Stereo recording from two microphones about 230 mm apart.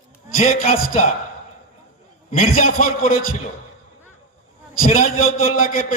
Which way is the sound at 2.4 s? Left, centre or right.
Left.